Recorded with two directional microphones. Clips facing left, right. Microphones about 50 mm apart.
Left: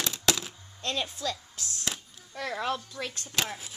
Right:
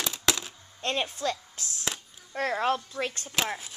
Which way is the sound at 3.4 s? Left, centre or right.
Centre.